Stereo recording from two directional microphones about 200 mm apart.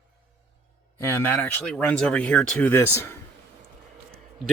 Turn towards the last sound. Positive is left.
turn(degrees=10)  # may be behind; listen again after turning